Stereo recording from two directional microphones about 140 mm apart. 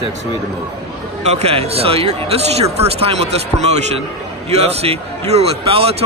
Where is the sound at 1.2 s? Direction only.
45° right (ahead or behind).